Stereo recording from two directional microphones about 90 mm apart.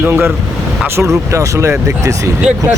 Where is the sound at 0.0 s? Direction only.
25° right (ahead or behind).